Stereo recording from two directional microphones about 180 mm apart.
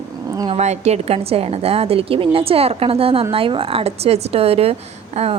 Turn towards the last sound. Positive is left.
turn(degrees=-35)  # may be behind; listen again after turning